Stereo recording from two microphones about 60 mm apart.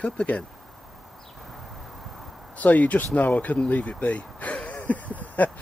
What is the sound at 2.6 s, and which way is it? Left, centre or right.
Speech, left.